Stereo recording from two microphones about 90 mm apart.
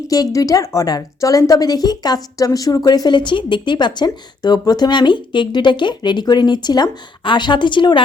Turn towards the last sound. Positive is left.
turn(degrees=60)  # may be behind; listen again after turning